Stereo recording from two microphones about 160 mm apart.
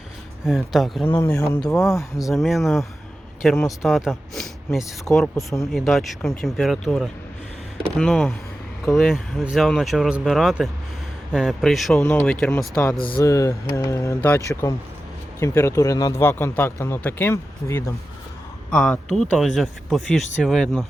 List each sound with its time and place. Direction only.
0.4 s speech: centre (ahead or behind)
1.0 s speech: 15° left (ahead or behind)
1.6 s speech: centre (ahead or behind)
13.2 s speech: 20° left (ahead or behind)
18.7 s speech: 5° left (ahead or behind)